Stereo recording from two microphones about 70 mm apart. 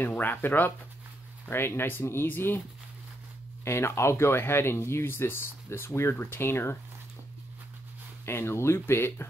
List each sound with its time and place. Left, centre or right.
0.0 s speech: left
3.6 s speech: left
8.3 s speech: left